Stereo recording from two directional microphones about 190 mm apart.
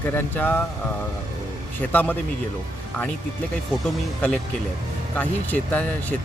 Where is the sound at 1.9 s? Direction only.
10° left (ahead or behind).